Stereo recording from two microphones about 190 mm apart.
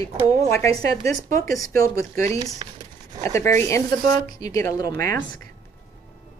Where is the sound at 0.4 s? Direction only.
15° left (ahead or behind).